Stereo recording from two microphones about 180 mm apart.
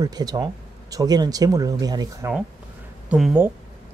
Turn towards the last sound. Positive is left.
turn(degrees=-5)  # may be behind; listen again after turning